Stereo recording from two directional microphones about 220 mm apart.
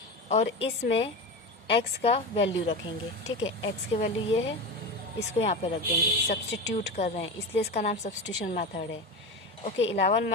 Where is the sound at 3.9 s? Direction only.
25° left (ahead or behind).